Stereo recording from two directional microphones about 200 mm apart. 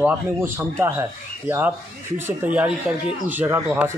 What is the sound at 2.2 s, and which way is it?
Speech, 10° right (ahead or behind).